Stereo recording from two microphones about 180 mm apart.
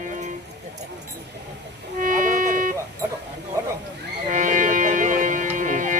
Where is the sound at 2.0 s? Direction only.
50° right (ahead or behind).